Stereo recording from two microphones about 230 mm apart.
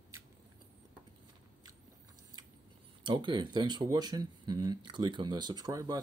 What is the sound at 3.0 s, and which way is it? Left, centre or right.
Speech, centre.